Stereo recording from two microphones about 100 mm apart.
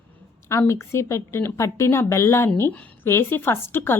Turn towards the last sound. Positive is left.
turn(degrees=25)  # may be behind; listen again after turning